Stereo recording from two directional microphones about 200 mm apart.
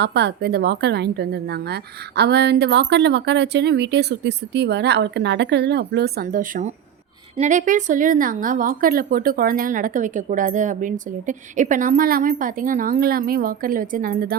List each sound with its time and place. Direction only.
0.0 s a woman's voice: 55° right (ahead or behind)